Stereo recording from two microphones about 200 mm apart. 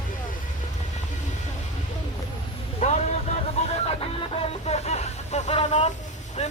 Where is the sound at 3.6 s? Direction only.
30° left (ahead or behind).